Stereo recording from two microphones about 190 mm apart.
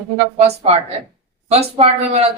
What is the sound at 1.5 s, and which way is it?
Speech, 35° right (ahead or behind).